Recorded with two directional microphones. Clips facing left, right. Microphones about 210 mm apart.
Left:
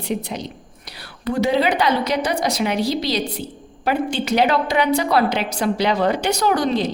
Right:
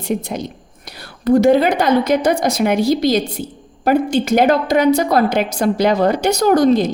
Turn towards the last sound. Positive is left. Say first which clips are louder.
# right 7 dB
turn(degrees=-45)  # may be behind; listen again after turning